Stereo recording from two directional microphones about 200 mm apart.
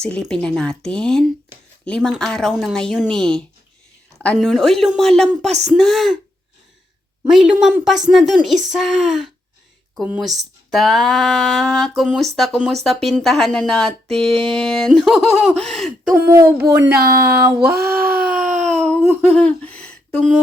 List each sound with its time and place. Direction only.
0.0 s speech: 5° left (ahead or behind)
7.3 s speech: centre (ahead or behind)
16.1 s speech: 10° right (ahead or behind)
16.7 s speech: 55° right (ahead or behind)
17.6 s a sound: 55° right (ahead or behind)
18.3 s a sound: 5° right (ahead or behind)